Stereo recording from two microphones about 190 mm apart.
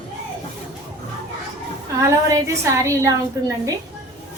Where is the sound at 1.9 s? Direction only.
15° right (ahead or behind).